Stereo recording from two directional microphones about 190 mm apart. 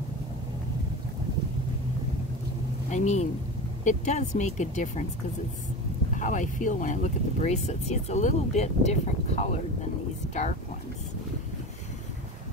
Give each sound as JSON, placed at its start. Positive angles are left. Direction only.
{"t": 2.9, "sound": "speech", "side_deg": 40}
{"t": 6.1, "sound": "speech", "side_deg": 40}